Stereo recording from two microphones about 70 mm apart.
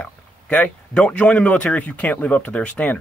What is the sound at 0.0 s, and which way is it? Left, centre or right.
Speech, centre.